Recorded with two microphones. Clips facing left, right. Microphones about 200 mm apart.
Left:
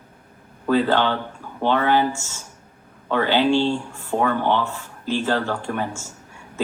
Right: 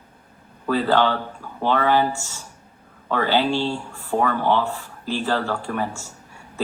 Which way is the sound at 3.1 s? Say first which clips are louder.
Left 2 dB; 40° right (ahead or behind).